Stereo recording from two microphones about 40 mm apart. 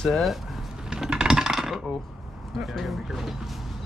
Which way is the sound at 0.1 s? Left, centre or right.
Centre.